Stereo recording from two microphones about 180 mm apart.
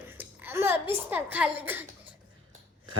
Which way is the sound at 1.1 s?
10° right (ahead or behind).